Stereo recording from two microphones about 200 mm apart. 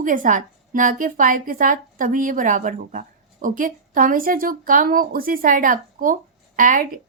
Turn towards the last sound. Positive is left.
turn(degrees=-45)  # may be behind; listen again after turning